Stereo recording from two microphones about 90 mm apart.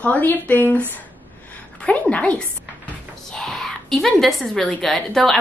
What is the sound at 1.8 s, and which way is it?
A woman's voice, 15° left (ahead or behind).